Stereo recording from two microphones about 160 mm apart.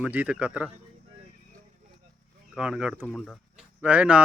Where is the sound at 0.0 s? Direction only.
10° right (ahead or behind).